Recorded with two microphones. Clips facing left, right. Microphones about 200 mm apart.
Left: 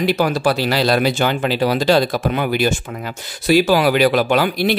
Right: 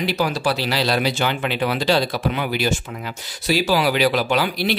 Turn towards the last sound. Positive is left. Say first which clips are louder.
# left 4 dB
turn(degrees=50)  # may be behind; listen again after turning